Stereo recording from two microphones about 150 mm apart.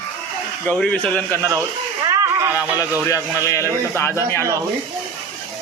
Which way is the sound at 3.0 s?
20° left (ahead or behind).